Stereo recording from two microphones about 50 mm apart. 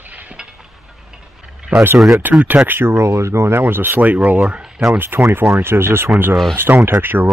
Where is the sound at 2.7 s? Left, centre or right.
Right.